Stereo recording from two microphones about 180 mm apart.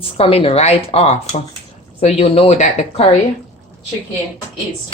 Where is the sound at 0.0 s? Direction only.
30° left (ahead or behind).